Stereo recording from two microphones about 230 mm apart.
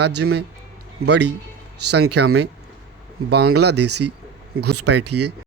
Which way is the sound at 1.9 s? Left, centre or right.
Right.